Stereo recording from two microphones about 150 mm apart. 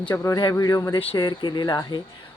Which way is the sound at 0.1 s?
20° left (ahead or behind).